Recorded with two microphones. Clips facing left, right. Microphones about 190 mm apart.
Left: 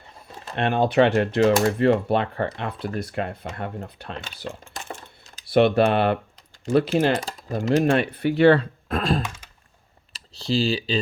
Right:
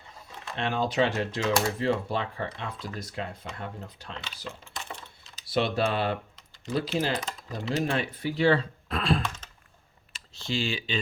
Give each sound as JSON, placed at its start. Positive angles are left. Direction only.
{"t": 0.5, "sound": "speech", "side_deg": 60}
{"t": 7.9, "sound": "speech", "side_deg": 65}